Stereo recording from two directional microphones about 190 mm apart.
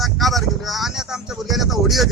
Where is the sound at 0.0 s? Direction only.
Centre (ahead or behind).